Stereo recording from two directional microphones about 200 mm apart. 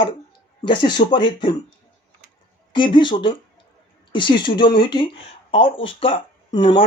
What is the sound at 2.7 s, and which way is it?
Speech, 25° left (ahead or behind).